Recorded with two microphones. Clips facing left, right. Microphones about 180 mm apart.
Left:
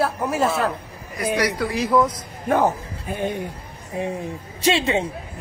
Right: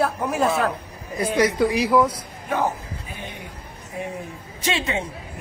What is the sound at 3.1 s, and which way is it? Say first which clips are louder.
Speech: left 14 dB; 50° left (ahead or behind).